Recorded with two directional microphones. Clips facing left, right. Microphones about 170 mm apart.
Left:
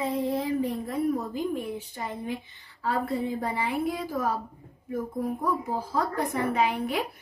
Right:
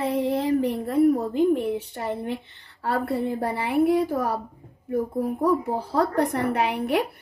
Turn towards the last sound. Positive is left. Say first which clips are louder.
# right 3 dB
turn(degrees=-70)  # may be behind; listen again after turning